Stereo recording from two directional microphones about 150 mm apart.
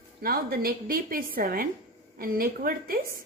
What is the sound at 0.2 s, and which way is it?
A woman's voice, 85° right.